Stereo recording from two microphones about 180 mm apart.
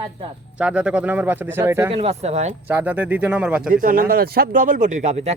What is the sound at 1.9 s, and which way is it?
Speech, 30° right (ahead or behind).